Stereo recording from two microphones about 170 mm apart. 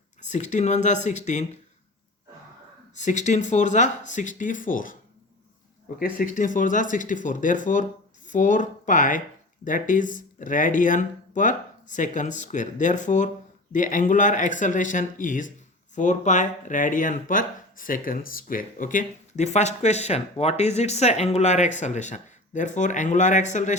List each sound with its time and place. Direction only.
0.2 s speech: 45° left (ahead or behind)
2.9 s speech: 45° left (ahead or behind)
6.0 s speech: 55° left (ahead or behind)